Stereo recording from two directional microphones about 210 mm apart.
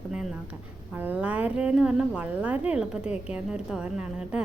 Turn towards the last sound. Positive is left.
turn(degrees=-5)  # may be behind; listen again after turning